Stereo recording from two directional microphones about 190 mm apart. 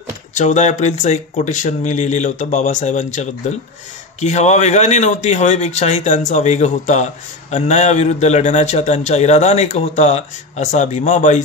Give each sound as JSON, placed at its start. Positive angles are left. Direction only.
{"t": 0.3, "sound": "a man's voice", "side_deg": 40}